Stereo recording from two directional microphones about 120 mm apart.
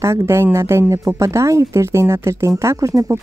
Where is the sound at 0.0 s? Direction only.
25° right (ahead or behind).